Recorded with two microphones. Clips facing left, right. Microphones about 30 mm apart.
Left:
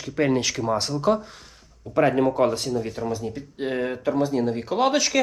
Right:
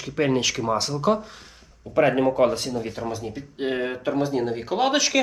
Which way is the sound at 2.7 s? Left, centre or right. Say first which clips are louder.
Left 2 dB; right.